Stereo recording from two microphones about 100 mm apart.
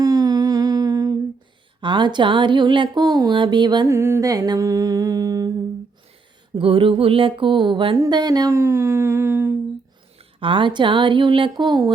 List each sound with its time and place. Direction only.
0.0 s humming: 40° right (ahead or behind)
1.8 s speech: 50° right (ahead or behind)
3.3 s speech: 50° right (ahead or behind)
3.8 s music: 25° right (ahead or behind)
6.6 s speech: 65° right (ahead or behind)
7.9 s a sound: 40° right (ahead or behind)
10.2 s speech: 60° right (ahead or behind); by 11.9 s 45° right (ahead or behind)